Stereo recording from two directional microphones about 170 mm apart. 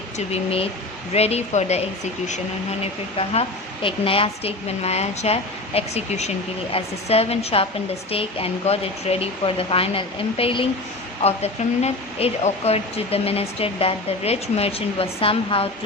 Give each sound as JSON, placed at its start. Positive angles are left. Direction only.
{"t": 0.3, "sound": "speech", "side_deg": 35}
{"t": 3.8, "sound": "speech", "side_deg": 35}